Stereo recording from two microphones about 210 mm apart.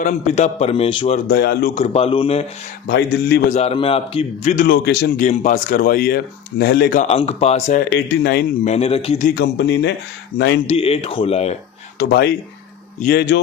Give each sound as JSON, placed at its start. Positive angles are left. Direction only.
{"t": 0.0, "sound": "a man's voice", "side_deg": 35}
{"t": 1.3, "sound": "a man's voice", "side_deg": 50}
{"t": 1.7, "sound": "a man's voice", "side_deg": 30}
{"t": 2.8, "sound": "a man's voice", "side_deg": 55}
{"t": 3.5, "sound": "a man's voice", "side_deg": 30}
{"t": 4.5, "sound": "a man's voice", "side_deg": 50}
{"t": 7.0, "sound": "a man's voice", "side_deg": 30}
{"t": 7.9, "sound": "a man's voice", "side_deg": 55}
{"t": 8.6, "sound": "a man's voice", "side_deg": 30}
{"t": 9.4, "sound": "speech", "side_deg": 55}
{"t": 10.7, "sound": "a man's voice", "side_deg": 30}
{"t": 11.9, "sound": "a man's voice", "side_deg": 50}